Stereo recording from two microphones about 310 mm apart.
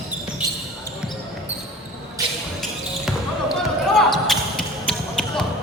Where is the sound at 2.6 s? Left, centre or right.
Centre.